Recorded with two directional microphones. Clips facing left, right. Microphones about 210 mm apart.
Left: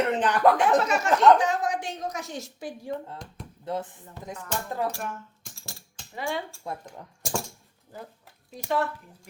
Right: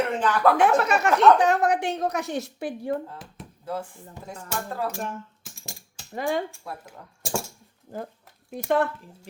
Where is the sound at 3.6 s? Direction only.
20° left (ahead or behind).